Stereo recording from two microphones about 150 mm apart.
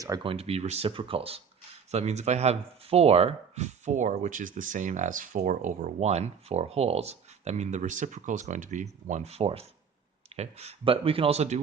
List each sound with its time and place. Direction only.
0.2 s speech: 40° right (ahead or behind)